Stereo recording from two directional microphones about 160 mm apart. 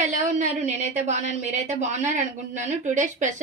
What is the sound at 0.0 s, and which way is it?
A woman's voice, 50° right (ahead or behind).